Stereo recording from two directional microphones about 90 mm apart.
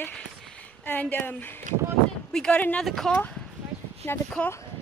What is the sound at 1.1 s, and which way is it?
Speech, 20° left (ahead or behind).